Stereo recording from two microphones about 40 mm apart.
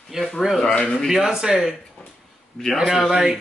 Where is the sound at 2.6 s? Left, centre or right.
Centre.